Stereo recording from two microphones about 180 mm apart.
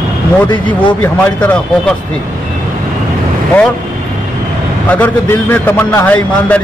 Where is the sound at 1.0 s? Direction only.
10° left (ahead or behind).